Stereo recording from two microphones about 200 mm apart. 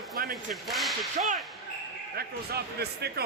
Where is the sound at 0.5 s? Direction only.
Centre (ahead or behind).